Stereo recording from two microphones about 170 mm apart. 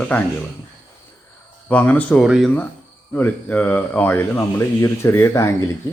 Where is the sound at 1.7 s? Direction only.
10° left (ahead or behind).